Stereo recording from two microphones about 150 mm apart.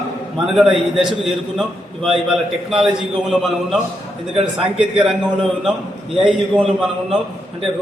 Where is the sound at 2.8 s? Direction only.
5° right (ahead or behind).